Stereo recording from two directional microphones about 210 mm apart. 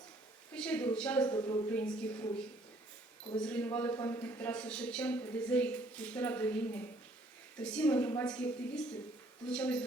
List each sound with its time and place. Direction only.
0.5 s a woman's voice: 5° left (ahead or behind)
1.3 s a man's voice: 20° left (ahead or behind)
3.4 s a man's voice: 5° left (ahead or behind)